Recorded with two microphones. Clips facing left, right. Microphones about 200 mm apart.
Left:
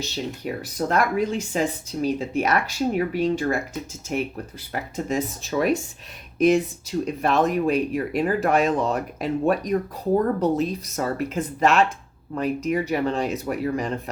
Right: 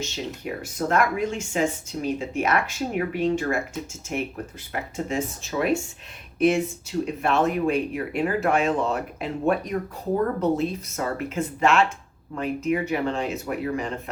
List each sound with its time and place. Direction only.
0.0 s speech: 35° left (ahead or behind)
4.7 s speech: 40° left (ahead or behind)